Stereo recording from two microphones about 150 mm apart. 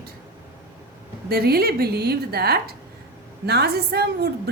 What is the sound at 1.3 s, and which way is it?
A woman's voice, 90° right.